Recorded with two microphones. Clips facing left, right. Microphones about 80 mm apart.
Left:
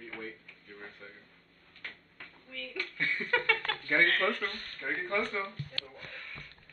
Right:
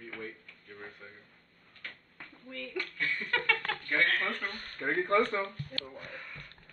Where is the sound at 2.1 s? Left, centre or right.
Right.